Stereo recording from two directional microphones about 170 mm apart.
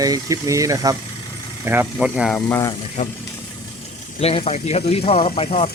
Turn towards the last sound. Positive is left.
turn(degrees=35)  # may be behind; listen again after turning